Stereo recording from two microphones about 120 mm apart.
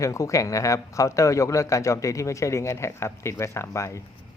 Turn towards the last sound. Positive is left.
turn(degrees=25)  # may be behind; listen again after turning